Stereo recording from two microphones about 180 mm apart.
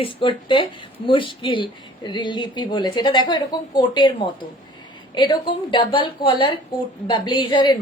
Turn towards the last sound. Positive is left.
turn(degrees=25)  # may be behind; listen again after turning